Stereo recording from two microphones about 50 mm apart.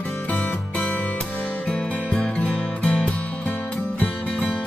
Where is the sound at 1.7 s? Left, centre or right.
Left.